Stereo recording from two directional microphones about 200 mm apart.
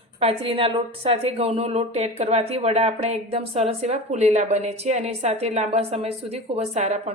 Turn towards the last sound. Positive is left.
turn(degrees=-35)  # may be behind; listen again after turning